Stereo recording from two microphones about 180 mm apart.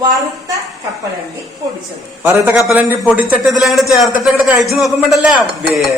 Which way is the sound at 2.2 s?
10° right (ahead or behind).